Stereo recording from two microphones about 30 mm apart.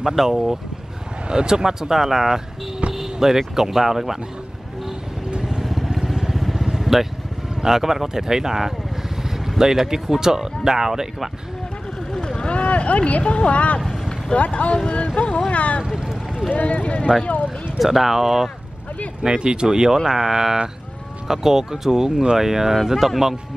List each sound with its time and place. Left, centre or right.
0.1 s speech: centre
1.3 s speech: right
5.6 s vehicle: centre
6.5 s vehicle: centre
7.6 s speech: centre
12.4 s speech: left
15.1 s speech: left
15.5 s speech: left
17.7 s speech: centre
19.2 s speech: right; by 23.3 s centre